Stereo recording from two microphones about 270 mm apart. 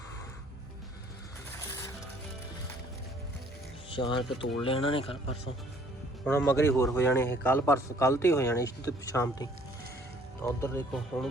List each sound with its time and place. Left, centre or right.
1.5 s music: centre
3.8 s speech: centre
6.2 s a man's voice: centre